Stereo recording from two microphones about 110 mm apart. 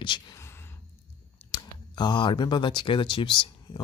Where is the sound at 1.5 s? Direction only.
40° left (ahead or behind).